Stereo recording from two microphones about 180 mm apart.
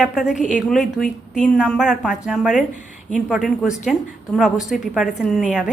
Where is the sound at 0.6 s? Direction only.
Centre (ahead or behind).